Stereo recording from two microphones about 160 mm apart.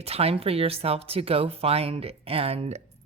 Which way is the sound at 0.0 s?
40° right (ahead or behind).